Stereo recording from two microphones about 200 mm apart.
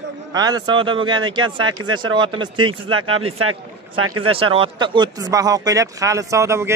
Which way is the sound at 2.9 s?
90° right.